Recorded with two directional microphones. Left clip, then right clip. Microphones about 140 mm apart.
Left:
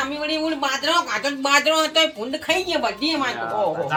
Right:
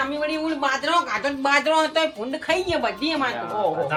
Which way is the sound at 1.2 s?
15° left (ahead or behind).